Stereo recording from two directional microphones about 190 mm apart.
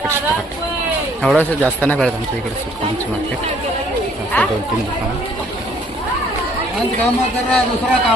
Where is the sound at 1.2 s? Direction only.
5° left (ahead or behind).